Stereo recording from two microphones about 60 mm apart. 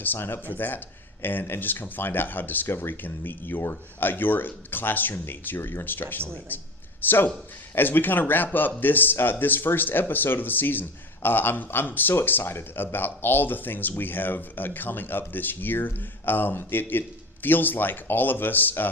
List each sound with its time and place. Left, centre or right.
0.0 s speech: left